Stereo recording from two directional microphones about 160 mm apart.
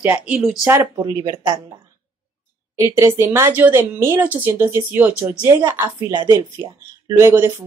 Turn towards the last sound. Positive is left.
turn(degrees=-15)  # may be behind; listen again after turning